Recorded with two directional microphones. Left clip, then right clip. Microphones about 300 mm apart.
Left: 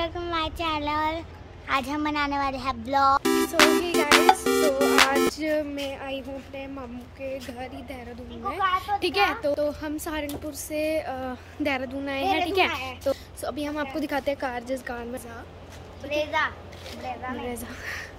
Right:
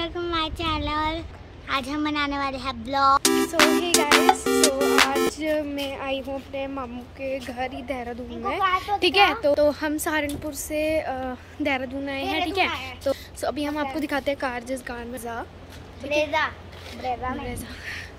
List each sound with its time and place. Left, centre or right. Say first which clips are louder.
0.0 s speech: right 1 dB; centre
16.1 s a woman's voice: right 3 dB; right
17.5 s a woman's voice: left 1 dB; centre